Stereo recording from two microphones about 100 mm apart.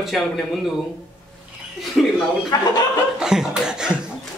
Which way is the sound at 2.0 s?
Centre (ahead or behind).